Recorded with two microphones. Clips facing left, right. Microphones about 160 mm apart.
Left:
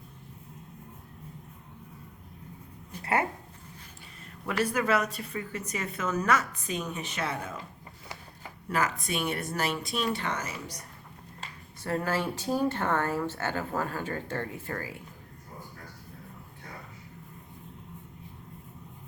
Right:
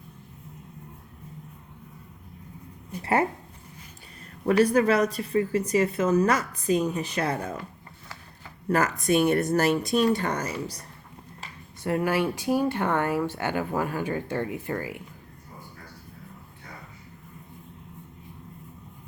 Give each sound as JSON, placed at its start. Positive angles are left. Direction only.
{"t": 3.0, "sound": "speech", "side_deg": -30}
{"t": 4.4, "sound": "speech", "side_deg": -40}
{"t": 8.7, "sound": "speech", "side_deg": -45}
{"t": 11.8, "sound": "speech", "side_deg": -15}